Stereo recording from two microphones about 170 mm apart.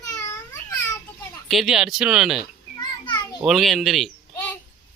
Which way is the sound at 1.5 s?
Centre (ahead or behind).